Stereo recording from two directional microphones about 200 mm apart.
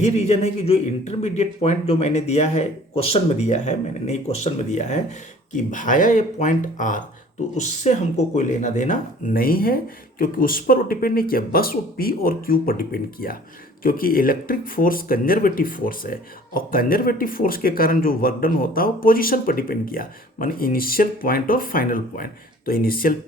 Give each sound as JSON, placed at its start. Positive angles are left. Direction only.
{"t": 0.0, "sound": "speech", "side_deg": 35}